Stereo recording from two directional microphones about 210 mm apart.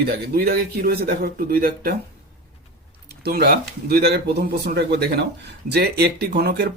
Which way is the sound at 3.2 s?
50° right (ahead or behind).